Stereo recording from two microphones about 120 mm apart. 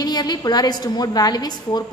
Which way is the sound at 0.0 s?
35° left (ahead or behind).